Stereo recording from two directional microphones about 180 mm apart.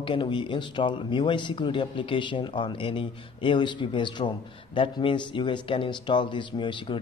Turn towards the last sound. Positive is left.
turn(degrees=25)  # may be behind; listen again after turning